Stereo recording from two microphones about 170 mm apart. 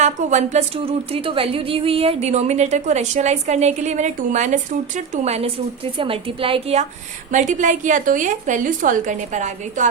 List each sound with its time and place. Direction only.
0.0 s speech: 45° right (ahead or behind)
7.3 s a woman's voice: 45° right (ahead or behind)